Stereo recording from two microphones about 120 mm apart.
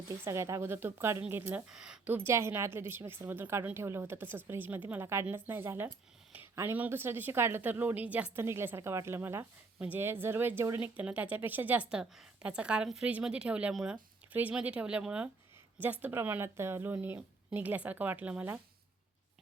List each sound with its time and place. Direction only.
0.3 s a woman's voice: 25° right (ahead or behind)
1.7 s speech: 5° right (ahead or behind)
2.1 s a woman's voice: 20° right (ahead or behind)